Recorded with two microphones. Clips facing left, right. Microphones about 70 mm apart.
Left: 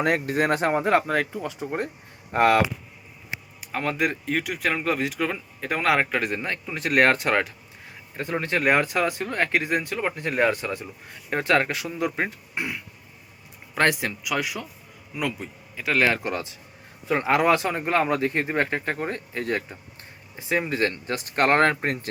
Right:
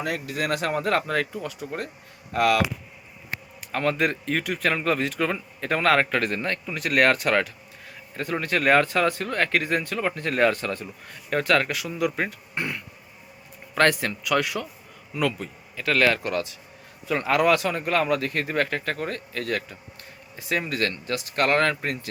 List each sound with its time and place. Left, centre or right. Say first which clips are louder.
0.0 s speech: left 5 dB; left
0.8 s speech: left 2 dB; centre; by 2.6 s left
3.7 s speech: right 2 dB; centre
12.5 s throat clearing: right 1 dB; centre
13.7 s speech: right 1 dB; centre; by 22.1 s left